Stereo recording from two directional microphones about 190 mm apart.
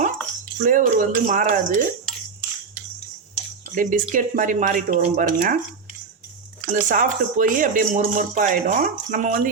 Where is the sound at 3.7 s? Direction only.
45° right (ahead or behind).